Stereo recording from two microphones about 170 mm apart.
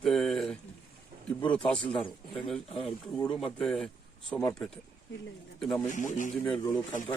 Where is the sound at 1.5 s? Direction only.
5° left (ahead or behind).